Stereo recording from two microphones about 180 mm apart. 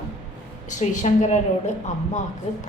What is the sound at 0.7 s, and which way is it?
Speech, 45° left (ahead or behind).